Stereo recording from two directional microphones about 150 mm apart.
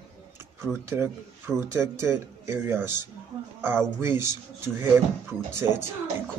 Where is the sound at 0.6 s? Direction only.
15° right (ahead or behind).